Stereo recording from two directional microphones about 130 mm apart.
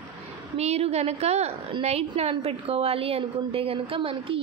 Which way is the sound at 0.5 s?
55° right (ahead or behind).